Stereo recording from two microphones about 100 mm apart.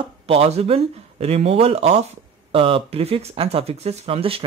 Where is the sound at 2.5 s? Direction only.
65° right (ahead or behind).